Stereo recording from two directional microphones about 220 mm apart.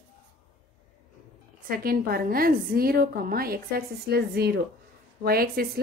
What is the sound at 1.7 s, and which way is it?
A woman's voice, 40° right (ahead or behind).